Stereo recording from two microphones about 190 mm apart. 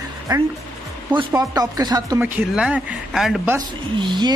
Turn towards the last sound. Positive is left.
turn(degrees=-25)  # may be behind; listen again after turning